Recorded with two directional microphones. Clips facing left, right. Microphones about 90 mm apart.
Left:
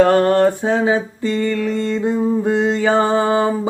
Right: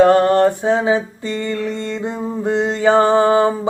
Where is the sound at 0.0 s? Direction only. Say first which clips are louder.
Right 1 dB; 20° right (ahead or behind).